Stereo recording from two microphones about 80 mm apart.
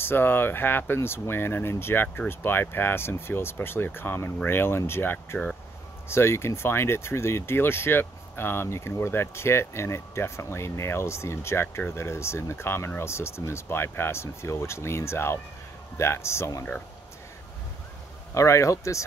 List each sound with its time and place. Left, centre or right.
0.0 s speech: left
18.3 s speech: left